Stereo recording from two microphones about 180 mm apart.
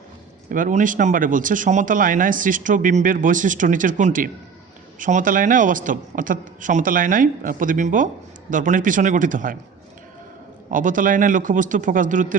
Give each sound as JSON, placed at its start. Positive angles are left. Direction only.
{"t": 0.5, "sound": "speech", "side_deg": -45}
{"t": 10.7, "sound": "speech", "side_deg": -45}